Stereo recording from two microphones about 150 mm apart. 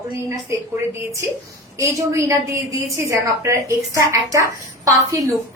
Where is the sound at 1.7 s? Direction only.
20° right (ahead or behind).